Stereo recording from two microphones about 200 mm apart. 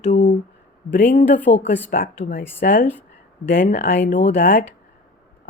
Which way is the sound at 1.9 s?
45° left (ahead or behind).